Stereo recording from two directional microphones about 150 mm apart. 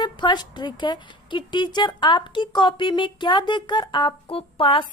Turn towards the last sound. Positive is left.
turn(degrees=35)  # may be behind; listen again after turning